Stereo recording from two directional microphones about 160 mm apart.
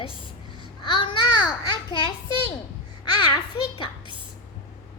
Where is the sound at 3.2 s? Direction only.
30° left (ahead or behind).